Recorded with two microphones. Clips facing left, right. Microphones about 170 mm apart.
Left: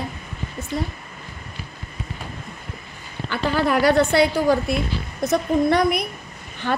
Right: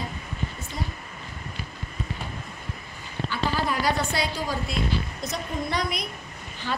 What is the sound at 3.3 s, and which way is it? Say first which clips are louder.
A woman's voice: left 7 dB; 65° left (ahead or behind).